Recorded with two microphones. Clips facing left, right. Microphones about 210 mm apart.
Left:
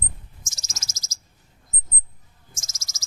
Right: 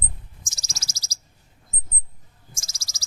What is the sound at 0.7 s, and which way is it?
Bird vocalization, 35° right (ahead or behind).